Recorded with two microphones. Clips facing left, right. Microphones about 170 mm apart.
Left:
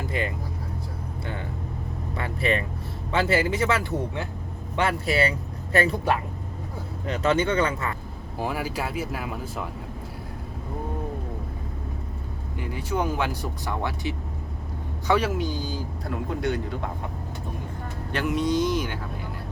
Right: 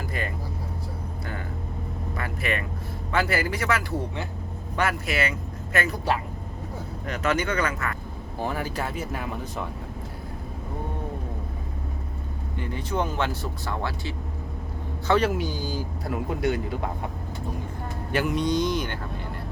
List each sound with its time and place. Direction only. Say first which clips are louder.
2.1 s vehicle: left 4 dB; 30° left (ahead or behind)
3.1 s speech: left 2 dB; 25° left (ahead or behind)
7.1 s speech: left 3 dB; 30° left (ahead or behind)
8.4 s speech: left 1 dB; 5° left (ahead or behind)
12.5 s speech: even; 5° left (ahead or behind)
15.4 s speech: even; 5° right (ahead or behind)
18.1 s speech: even; centre (ahead or behind)